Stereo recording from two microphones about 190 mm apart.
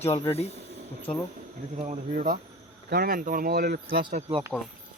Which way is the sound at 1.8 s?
40° right (ahead or behind).